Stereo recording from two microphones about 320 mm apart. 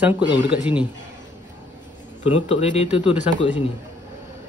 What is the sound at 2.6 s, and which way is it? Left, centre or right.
Speech, centre.